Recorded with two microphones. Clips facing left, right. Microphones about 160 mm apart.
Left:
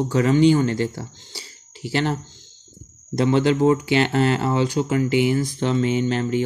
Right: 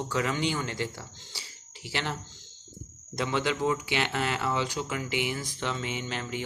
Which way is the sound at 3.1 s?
35° left (ahead or behind).